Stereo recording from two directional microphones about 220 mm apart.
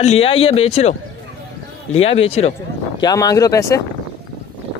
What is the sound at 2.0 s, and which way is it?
Speech, 25° left (ahead or behind).